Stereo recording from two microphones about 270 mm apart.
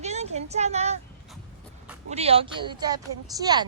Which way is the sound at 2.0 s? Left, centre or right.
Right.